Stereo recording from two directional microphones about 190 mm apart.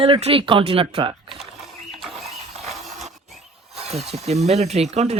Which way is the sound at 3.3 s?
Centre (ahead or behind).